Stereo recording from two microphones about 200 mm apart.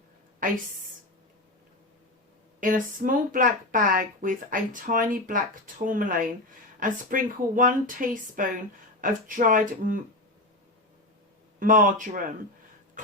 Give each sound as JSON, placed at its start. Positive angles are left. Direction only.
{"t": 0.4, "sound": "a sound", "side_deg": -40}
{"t": 2.6, "sound": "speech", "side_deg": -40}
{"t": 11.6, "sound": "speech", "side_deg": -40}